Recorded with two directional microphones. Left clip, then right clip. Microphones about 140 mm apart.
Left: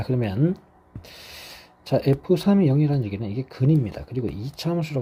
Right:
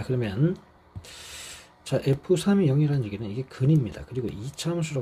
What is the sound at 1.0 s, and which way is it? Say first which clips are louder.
Speech: even; 35° left (ahead or behind).